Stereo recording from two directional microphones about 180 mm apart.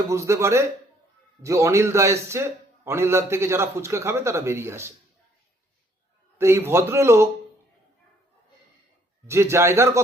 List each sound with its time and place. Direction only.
0.1 s a man's voice: 15° right (ahead or behind)
6.4 s a man's voice: 15° right (ahead or behind)
9.2 s a man's voice: 15° right (ahead or behind)